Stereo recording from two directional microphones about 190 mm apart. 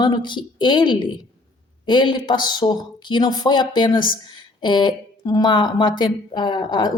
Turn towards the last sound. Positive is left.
turn(degrees=25)  # may be behind; listen again after turning